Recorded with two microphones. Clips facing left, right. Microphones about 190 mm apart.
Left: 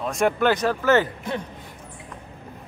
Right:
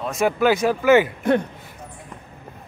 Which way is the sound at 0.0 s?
5° right (ahead or behind).